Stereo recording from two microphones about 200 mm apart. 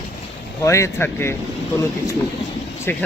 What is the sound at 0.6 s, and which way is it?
A man's voice, 15° left (ahead or behind).